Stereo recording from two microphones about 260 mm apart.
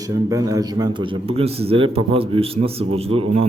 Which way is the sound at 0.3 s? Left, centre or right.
Centre.